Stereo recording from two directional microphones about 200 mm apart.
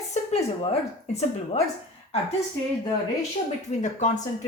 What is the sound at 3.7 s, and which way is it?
Speech, 35° left (ahead or behind).